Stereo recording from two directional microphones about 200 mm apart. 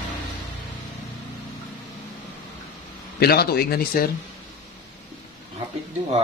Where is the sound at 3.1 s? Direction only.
50° left (ahead or behind).